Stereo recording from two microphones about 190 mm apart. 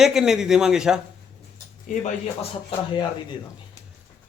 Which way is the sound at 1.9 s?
40° left (ahead or behind).